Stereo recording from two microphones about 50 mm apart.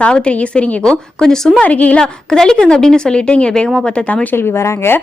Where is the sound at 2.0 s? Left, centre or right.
Centre.